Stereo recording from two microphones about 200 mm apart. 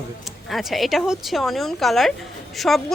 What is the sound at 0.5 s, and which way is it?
A woman's voice, centre (ahead or behind).